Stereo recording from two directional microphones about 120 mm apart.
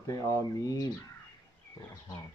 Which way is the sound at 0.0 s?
25° left (ahead or behind).